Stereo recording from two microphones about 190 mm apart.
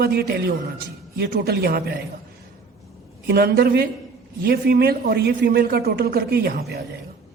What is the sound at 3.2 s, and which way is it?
A man's voice, 55° right (ahead or behind).